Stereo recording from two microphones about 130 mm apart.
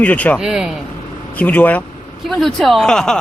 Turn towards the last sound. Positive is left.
turn(degrees=5)  # may be behind; listen again after turning